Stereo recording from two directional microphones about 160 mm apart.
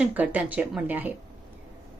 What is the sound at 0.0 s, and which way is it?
Speech, 10° right (ahead or behind).